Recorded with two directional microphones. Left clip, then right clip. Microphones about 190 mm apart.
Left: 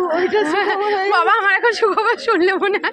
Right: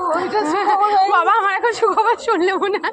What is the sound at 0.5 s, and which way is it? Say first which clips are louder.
A woman's voice: right 2 dB; 5° left (ahead or behind).